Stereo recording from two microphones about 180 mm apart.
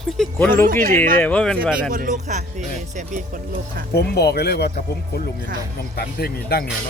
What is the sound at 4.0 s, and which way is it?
Speech, 65° left (ahead or behind).